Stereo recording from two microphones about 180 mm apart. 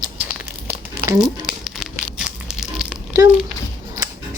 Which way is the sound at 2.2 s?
5° right (ahead or behind).